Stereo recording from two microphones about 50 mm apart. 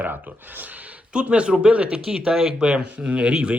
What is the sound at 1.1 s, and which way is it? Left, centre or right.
Speech, right.